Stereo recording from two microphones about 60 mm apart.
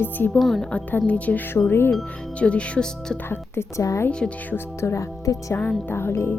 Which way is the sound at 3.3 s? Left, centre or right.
Left.